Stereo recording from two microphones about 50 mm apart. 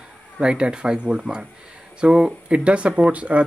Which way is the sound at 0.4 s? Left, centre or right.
Centre.